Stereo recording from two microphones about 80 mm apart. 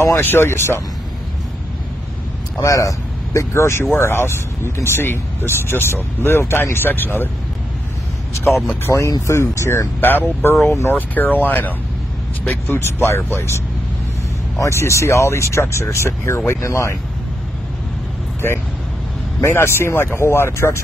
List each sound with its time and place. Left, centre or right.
0.1 s speech: left
2.6 s speech: left
3.3 s speech: left
8.8 s speech: left
14.6 s speech: left
19.4 s speech: left